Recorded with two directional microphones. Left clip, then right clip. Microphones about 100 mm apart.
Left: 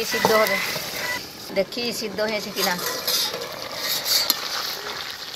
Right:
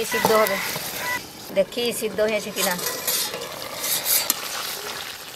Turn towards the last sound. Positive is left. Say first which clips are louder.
# left 1 dB
turn(degrees=0)  # may be behind; listen again after turning